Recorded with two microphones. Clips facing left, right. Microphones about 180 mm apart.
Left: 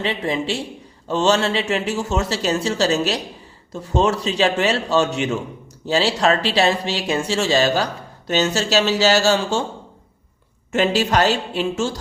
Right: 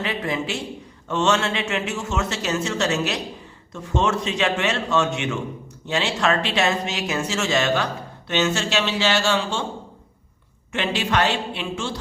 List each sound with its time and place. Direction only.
0.0 s a man's voice: 30° left (ahead or behind)
10.7 s a man's voice: 40° left (ahead or behind)